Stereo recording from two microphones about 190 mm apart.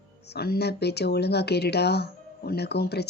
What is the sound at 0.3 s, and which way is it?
Speech, 55° left (ahead or behind).